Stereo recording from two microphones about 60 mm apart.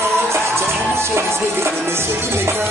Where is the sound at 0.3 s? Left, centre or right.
Right.